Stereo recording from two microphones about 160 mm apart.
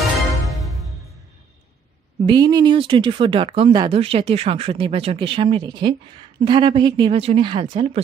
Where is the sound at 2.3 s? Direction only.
25° right (ahead or behind).